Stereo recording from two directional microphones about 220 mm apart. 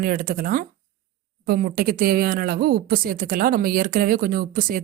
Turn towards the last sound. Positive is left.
turn(degrees=-40)  # may be behind; listen again after turning